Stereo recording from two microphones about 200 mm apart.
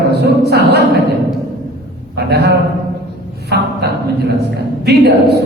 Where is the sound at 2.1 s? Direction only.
55° right (ahead or behind).